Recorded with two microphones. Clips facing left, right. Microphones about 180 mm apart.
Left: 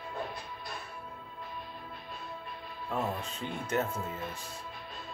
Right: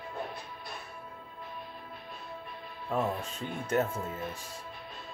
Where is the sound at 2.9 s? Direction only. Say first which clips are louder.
Right 3 dB; 45° right (ahead or behind).